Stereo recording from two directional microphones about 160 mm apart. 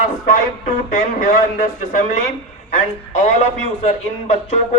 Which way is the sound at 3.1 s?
45° left (ahead or behind).